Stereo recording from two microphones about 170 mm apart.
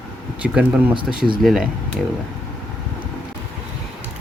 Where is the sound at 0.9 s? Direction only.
30° right (ahead or behind).